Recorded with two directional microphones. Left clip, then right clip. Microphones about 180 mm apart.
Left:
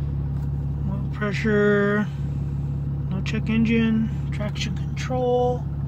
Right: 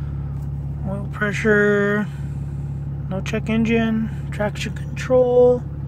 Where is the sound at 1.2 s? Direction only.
45° right (ahead or behind).